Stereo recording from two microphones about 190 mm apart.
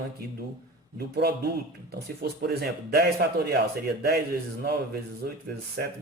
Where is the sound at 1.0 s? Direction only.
60° right (ahead or behind).